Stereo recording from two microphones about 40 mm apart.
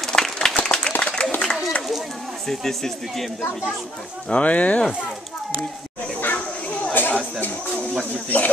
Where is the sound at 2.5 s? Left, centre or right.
Centre.